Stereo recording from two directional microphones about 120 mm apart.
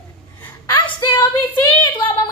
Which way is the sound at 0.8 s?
40° left (ahead or behind).